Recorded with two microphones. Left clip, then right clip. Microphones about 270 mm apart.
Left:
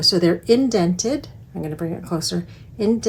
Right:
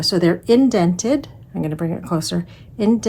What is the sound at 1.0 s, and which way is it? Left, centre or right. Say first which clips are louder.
Speech: right 3 dB; right.